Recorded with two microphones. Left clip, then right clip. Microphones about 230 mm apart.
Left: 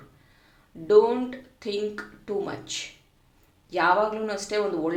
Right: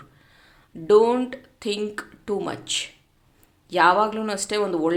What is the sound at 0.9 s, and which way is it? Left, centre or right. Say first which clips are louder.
Speech: right 2 dB; right.